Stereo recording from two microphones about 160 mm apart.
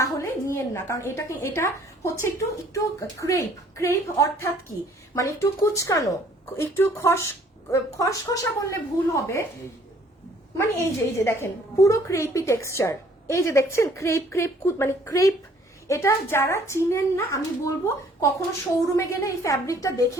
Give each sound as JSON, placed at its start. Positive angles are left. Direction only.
{"t": 0.0, "sound": "a woman's voice", "side_deg": 20}
{"t": 10.6, "sound": "a woman's voice", "side_deg": 15}